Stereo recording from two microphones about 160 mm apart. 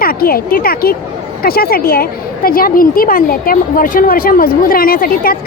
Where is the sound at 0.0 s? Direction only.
70° left (ahead or behind).